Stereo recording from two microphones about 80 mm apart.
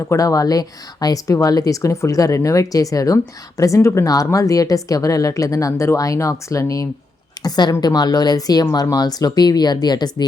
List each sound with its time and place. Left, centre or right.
0.1 s a woman's voice: left
7.4 s a woman's voice: left